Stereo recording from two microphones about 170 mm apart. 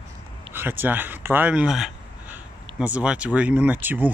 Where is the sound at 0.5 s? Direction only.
10° right (ahead or behind).